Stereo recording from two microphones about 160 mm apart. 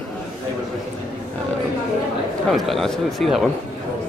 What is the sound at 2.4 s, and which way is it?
Speech, centre (ahead or behind).